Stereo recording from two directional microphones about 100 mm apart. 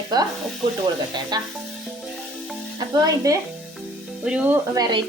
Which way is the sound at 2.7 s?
40° right (ahead or behind).